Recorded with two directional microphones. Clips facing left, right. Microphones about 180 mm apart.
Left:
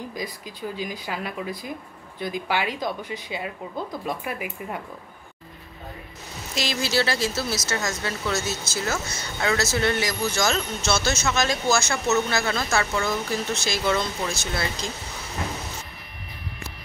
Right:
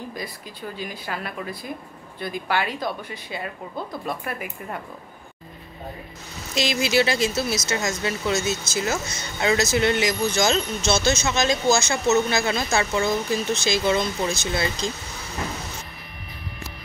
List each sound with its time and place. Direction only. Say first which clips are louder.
0.1 s speech: left 1 dB; 15° left (ahead or behind)
6.5 s speech: right 4 dB; 20° right (ahead or behind)